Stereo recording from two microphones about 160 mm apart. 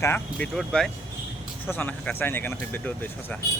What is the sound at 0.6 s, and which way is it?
Speech, centre (ahead or behind).